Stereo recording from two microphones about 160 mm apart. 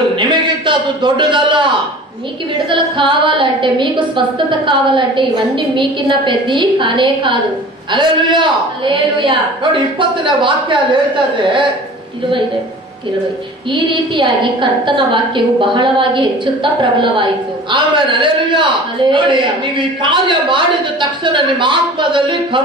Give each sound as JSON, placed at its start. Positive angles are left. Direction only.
{"t": 0.2, "sound": "a man's voice", "side_deg": -30}
{"t": 3.0, "sound": "a man's voice", "side_deg": -30}
{"t": 9.9, "sound": "a man's voice", "side_deg": -30}
{"t": 13.8, "sound": "a man's voice", "side_deg": -30}